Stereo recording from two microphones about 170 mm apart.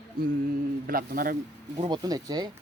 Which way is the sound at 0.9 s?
55° right (ahead or behind).